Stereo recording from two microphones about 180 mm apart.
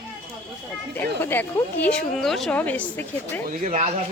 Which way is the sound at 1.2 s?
10° left (ahead or behind).